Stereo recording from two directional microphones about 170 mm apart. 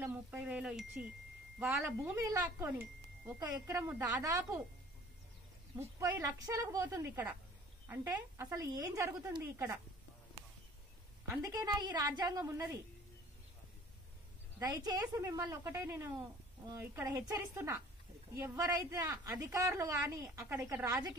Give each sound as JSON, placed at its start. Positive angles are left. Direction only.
{"t": 0.0, "sound": "a woman's voice", "side_deg": -10}
{"t": 2.1, "sound": "a woman's voice", "side_deg": -15}
{"t": 5.8, "sound": "a woman's voice", "side_deg": -15}
{"t": 11.2, "sound": "a woman's voice", "side_deg": -20}
{"t": 14.6, "sound": "a woman's voice", "side_deg": -25}
{"t": 18.3, "sound": "a woman's voice", "side_deg": -15}